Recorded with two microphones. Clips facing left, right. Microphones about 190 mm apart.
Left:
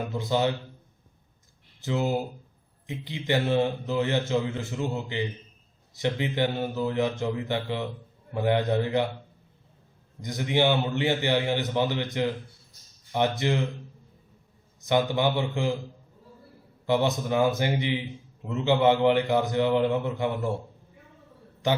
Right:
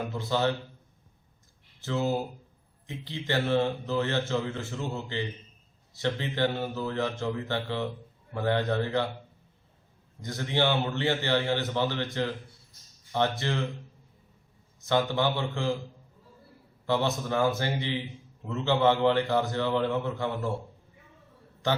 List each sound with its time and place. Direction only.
0.2 s a man's voice: 15° left (ahead or behind)
1.8 s a man's voice: 15° left (ahead or behind)
10.2 s a man's voice: 15° left (ahead or behind)
14.8 s a man's voice: 15° left (ahead or behind)
16.8 s a man's voice: 15° left (ahead or behind)